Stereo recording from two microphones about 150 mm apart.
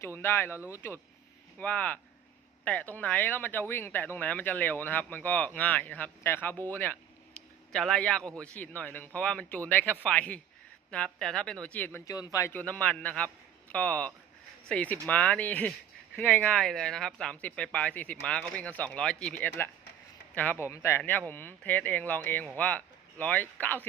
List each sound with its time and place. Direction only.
0.0 s speech: 15° left (ahead or behind)
7.3 s a sound: 5° left (ahead or behind)
8.4 s speech: 10° left (ahead or behind)
11.9 s speech: 25° left (ahead or behind)